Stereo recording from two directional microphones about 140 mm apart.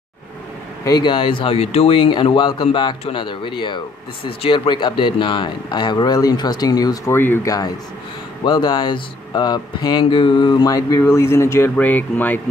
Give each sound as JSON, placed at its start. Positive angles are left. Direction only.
{"t": 0.8, "sound": "speech", "side_deg": 30}
{"t": 7.2, "sound": "speech", "side_deg": 15}